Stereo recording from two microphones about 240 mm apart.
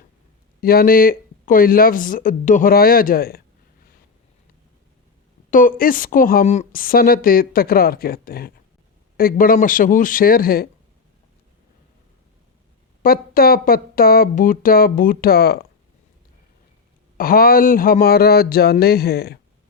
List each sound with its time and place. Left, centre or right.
0.6 s a woman's voice: left
5.5 s a woman's voice: left
13.0 s a woman's voice: left
17.2 s a woman's voice: left